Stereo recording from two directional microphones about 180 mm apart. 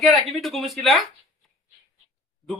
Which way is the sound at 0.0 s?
Centre (ahead or behind).